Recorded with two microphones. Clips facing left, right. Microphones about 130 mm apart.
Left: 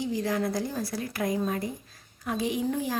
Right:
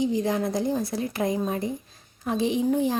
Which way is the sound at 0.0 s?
20° right (ahead or behind).